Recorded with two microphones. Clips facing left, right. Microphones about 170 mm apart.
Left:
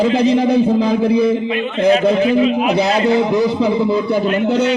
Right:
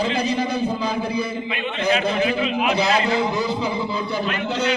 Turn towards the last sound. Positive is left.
turn(degrees=60)  # may be behind; listen again after turning